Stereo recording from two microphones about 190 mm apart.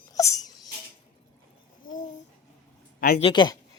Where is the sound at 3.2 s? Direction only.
25° left (ahead or behind).